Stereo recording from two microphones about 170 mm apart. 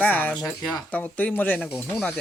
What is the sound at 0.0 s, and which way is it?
Speech, 10° left (ahead or behind).